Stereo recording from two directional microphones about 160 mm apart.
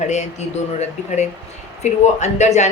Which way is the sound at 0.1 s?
45° left (ahead or behind).